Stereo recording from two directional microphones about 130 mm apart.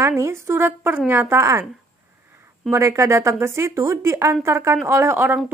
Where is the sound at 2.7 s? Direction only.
20° right (ahead or behind).